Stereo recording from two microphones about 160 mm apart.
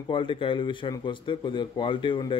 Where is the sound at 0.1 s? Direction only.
30° left (ahead or behind).